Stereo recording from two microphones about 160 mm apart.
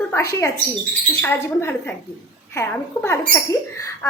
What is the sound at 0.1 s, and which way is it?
A woman's voice, 15° left (ahead or behind).